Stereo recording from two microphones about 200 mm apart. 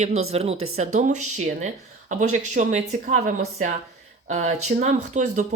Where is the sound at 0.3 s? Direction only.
30° right (ahead or behind).